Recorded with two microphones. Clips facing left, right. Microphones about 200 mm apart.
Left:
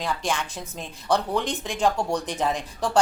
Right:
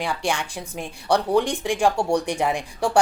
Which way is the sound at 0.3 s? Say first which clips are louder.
Right 2 dB; 15° right (ahead or behind).